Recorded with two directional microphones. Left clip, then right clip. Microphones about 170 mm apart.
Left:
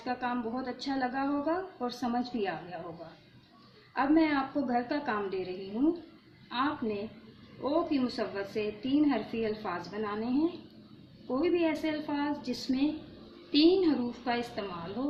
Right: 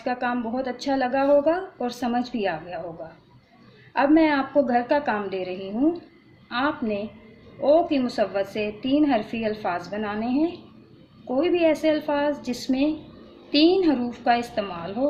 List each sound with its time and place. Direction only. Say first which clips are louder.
0.0 s a woman's voice: right 7 dB; 60° right (ahead or behind)
3.9 s a woman's voice: right 8 dB; 55° right (ahead or behind)